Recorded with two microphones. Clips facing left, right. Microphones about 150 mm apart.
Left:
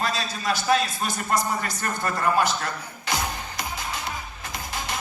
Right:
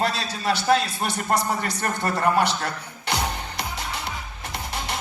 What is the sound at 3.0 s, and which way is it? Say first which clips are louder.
Music: right 2 dB; 60° right (ahead or behind).